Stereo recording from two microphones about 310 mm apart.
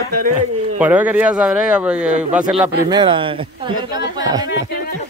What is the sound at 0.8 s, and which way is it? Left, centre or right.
Speech, centre.